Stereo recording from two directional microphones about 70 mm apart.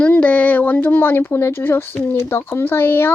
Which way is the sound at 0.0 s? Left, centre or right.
Left.